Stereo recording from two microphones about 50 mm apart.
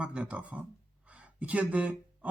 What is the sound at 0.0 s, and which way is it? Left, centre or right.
Speech, right.